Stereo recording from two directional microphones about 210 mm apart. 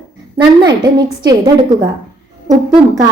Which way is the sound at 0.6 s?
20° right (ahead or behind).